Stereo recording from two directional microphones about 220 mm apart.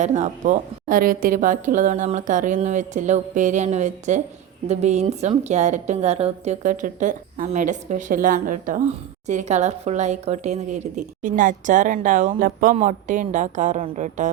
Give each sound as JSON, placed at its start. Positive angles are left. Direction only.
{"t": 0.0, "sound": "a woman's voice", "side_deg": -30}